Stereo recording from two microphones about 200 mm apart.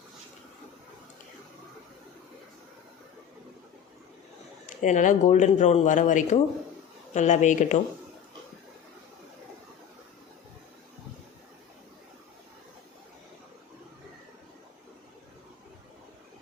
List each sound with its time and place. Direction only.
4.8 s speech: 40° left (ahead or behind)